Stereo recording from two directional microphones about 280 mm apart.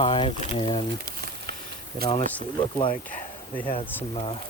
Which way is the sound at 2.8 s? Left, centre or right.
Centre.